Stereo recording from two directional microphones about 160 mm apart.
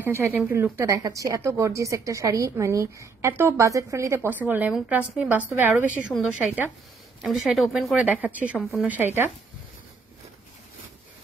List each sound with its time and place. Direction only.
0.0 s a woman's voice: 15° right (ahead or behind)